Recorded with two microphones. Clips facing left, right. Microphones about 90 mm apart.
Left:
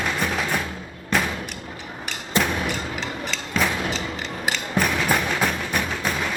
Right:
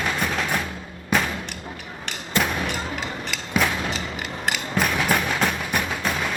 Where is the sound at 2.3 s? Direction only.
20° left (ahead or behind).